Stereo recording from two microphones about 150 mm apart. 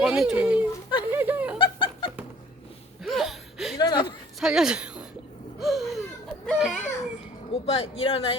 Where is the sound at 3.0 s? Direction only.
Centre (ahead or behind).